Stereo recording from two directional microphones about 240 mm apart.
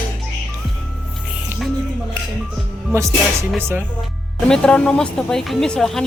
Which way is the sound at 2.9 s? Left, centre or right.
Centre.